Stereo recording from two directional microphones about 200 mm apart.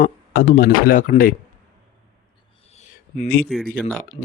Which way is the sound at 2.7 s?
35° left (ahead or behind).